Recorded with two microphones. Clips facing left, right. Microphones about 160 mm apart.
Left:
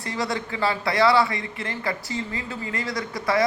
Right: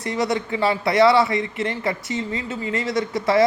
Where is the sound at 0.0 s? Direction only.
20° right (ahead or behind).